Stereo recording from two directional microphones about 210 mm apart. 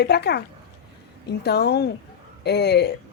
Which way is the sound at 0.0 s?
50° left (ahead or behind).